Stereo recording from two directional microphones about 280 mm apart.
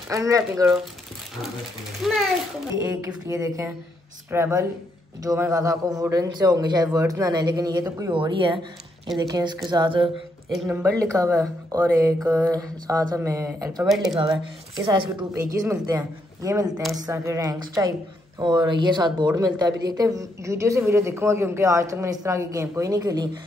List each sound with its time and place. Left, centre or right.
0.1 s speech: centre
2.0 s speech: centre
2.8 s speech: centre
10.5 s speech: centre
14.9 s speech: centre